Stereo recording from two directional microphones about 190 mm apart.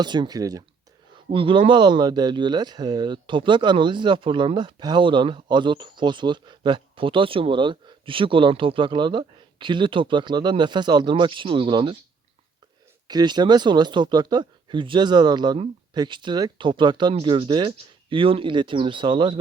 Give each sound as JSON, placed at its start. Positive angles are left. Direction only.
{"t": 0.0, "sound": "speech", "side_deg": -20}
{"t": 13.1, "sound": "speech", "side_deg": -20}